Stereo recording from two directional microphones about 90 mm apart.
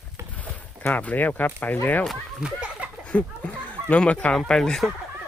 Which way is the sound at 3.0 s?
15° left (ahead or behind).